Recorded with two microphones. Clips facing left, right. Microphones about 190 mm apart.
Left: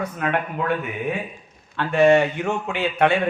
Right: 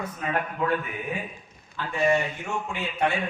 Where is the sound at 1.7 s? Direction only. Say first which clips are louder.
Left 8 dB; 75° left (ahead or behind).